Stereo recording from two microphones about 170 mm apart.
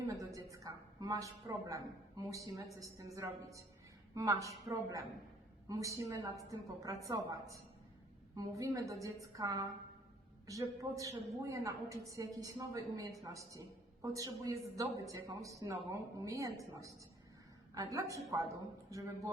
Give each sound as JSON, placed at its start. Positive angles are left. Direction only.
{"t": 0.1, "sound": "a woman's voice", "side_deg": -20}
{"t": 4.1, "sound": "a woman's voice", "side_deg": -20}